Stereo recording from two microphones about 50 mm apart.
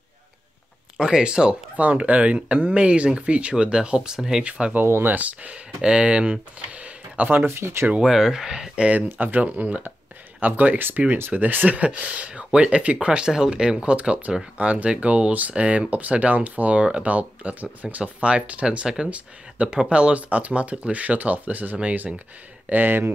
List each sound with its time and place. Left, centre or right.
1.0 s speech: centre
1.8 s speech: right
4.8 s speech: right
5.1 s speech: right
5.8 s speech: centre
7.3 s speech: right
8.0 s speech: centre; by 23.1 s right